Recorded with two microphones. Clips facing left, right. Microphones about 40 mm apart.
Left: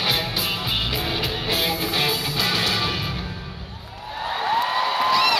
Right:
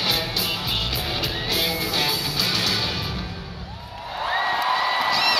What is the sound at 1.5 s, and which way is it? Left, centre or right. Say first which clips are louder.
Music: left 1 dB; left.